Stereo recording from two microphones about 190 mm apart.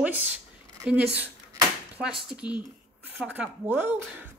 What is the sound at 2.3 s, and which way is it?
Speech, 5° right (ahead or behind).